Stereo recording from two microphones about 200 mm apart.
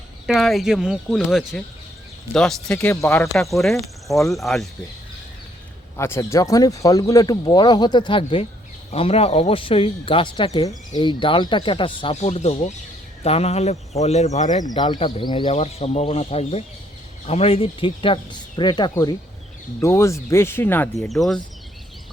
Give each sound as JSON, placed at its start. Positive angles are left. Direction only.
{"t": 0.3, "sound": "speech", "side_deg": 0}
{"t": 2.7, "sound": "speech", "side_deg": 15}
{"t": 3.3, "sound": "speech", "side_deg": 0}
{"t": 6.0, "sound": "speech", "side_deg": 15}
{"t": 14.6, "sound": "speech", "side_deg": 20}